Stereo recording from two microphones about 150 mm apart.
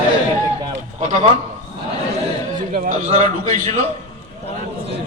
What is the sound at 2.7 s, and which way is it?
A man's voice, 60° right (ahead or behind).